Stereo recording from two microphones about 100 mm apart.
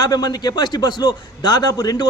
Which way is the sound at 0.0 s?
45° left (ahead or behind).